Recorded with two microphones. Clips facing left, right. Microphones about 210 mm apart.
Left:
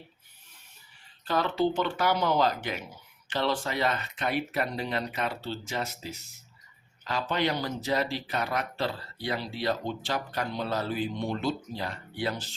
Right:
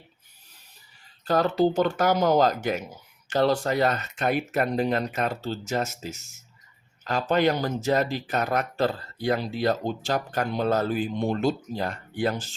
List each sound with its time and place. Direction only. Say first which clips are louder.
1.2 s speech: right 5 dB; 40° right (ahead or behind)